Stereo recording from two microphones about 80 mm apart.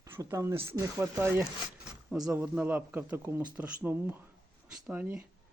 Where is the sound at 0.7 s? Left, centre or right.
Right.